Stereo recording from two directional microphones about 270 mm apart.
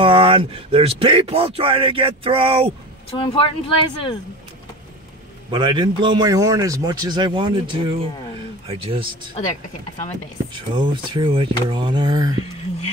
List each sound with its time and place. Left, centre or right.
0.0 s speech: centre
3.2 s speech: centre
5.5 s a man's voice: centre
10.5 s a man's voice: centre